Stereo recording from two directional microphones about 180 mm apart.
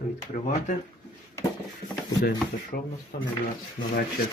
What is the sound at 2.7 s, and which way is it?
Speech, 55° left (ahead or behind).